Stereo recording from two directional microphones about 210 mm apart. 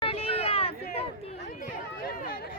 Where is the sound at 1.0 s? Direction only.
30° left (ahead or behind).